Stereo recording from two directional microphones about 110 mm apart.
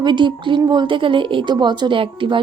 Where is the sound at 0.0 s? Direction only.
45° right (ahead or behind).